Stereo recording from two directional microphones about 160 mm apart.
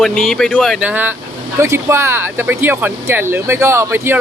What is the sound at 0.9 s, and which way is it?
Speech, 10° right (ahead or behind).